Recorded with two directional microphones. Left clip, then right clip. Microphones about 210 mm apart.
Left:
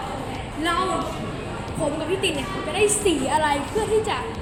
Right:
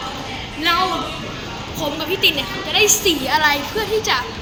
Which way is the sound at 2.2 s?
Centre (ahead or behind).